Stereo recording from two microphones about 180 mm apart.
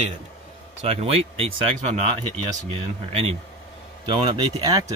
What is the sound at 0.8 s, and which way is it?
Speech, 35° right (ahead or behind).